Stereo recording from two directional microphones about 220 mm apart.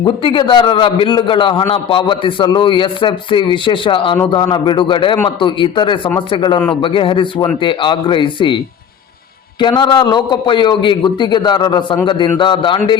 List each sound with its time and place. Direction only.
0.0 s a man's voice: 20° left (ahead or behind)